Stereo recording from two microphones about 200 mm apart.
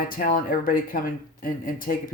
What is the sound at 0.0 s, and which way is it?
Speech, 45° left (ahead or behind).